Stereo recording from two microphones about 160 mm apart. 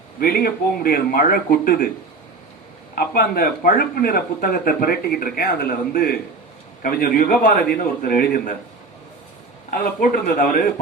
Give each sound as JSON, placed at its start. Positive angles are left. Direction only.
{"t": 0.2, "sound": "speech", "side_deg": 65}
{"t": 2.9, "sound": "speech", "side_deg": 65}
{"t": 9.6, "sound": "speech", "side_deg": 60}